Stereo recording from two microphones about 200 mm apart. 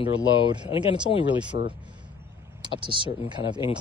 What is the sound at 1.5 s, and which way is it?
Speech, 60° left (ahead or behind).